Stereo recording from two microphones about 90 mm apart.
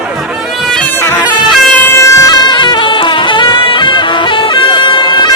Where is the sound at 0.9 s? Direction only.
25° left (ahead or behind).